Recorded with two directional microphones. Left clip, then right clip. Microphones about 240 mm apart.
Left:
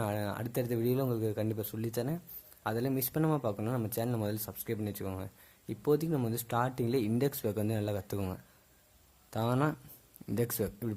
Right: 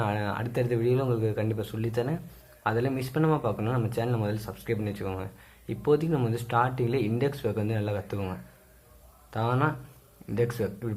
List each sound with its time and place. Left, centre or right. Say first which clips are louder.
0.0 s speech: right 6 dB; left